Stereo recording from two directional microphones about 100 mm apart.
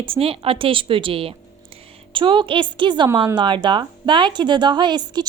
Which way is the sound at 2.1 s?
55° right (ahead or behind).